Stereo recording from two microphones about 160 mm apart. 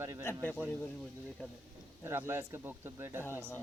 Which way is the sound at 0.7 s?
10° left (ahead or behind).